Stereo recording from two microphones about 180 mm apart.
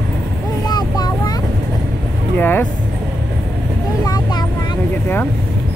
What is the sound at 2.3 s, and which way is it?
Vehicle, 10° left (ahead or behind).